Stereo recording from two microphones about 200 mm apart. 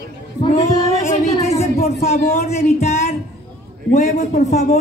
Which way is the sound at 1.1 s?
35° left (ahead or behind).